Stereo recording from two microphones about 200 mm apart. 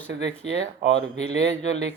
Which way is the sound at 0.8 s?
60° right (ahead or behind).